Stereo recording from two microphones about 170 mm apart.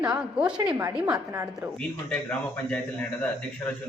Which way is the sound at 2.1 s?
10° left (ahead or behind).